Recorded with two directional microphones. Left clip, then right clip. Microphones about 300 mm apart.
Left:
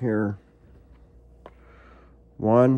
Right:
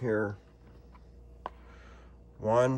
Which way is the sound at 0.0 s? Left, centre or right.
Left.